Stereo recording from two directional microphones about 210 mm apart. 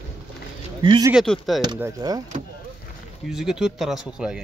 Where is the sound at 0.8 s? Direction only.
20° right (ahead or behind).